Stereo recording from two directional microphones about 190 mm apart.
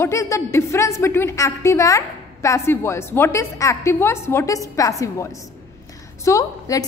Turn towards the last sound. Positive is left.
turn(degrees=15)  # may be behind; listen again after turning